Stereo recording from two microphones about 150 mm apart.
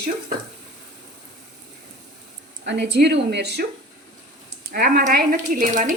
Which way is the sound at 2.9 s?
90° right.